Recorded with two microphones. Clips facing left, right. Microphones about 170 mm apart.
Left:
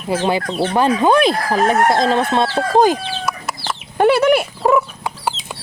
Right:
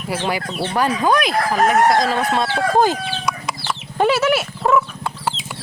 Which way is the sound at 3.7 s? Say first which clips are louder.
Left 4 dB; 15° left (ahead or behind).